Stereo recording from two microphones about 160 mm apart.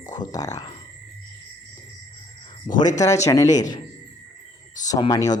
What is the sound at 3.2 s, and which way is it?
Speech, 20° left (ahead or behind).